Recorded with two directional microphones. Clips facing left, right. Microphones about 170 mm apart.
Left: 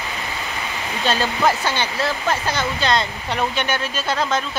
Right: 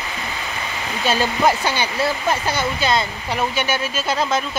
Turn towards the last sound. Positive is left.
turn(degrees=-10)  # may be behind; listen again after turning